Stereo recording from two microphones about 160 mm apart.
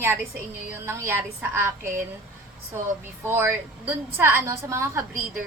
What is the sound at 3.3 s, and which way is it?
A woman's voice, 15° right (ahead or behind).